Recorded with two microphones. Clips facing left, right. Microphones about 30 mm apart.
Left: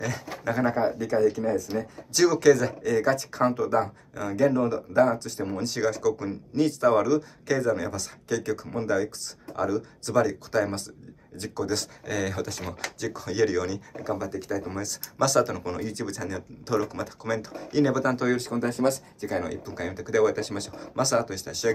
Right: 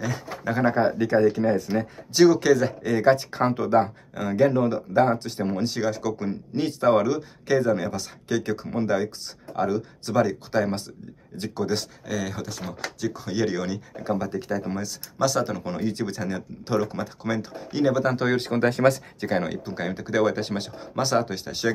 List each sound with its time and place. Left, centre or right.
0.0 s speech: centre
0.7 s speech: right
2.1 s speech: centre
2.8 s speech: right
5.7 s speech: centre
6.0 s speech: right
11.7 s speech: centre; by 14.7 s right
14.7 s speech: centre
18.5 s speech: right
19.2 s speech: right